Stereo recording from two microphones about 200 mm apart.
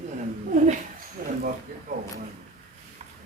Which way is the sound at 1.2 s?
45° right (ahead or behind).